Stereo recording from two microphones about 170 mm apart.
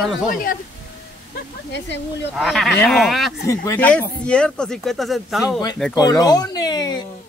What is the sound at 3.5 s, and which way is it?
Speech, 15° left (ahead or behind).